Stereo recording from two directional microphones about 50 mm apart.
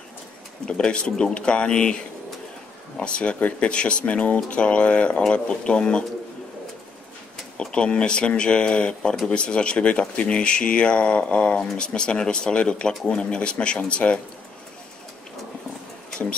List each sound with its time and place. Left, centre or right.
0.7 s speech: centre
3.0 s speech: left
7.7 s speech: left